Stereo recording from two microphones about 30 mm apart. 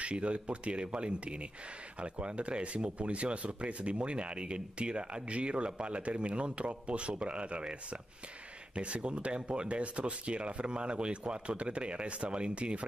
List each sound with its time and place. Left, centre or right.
0.0 s speech: right